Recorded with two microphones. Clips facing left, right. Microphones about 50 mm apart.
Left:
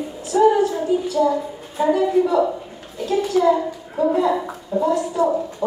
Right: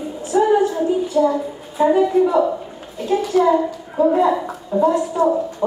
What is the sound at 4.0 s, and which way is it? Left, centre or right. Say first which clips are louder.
A woman's voice: right 3 dB; right.